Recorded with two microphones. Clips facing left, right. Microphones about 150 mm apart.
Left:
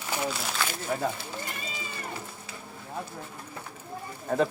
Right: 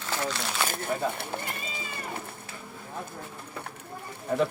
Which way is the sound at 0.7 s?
60° right (ahead or behind).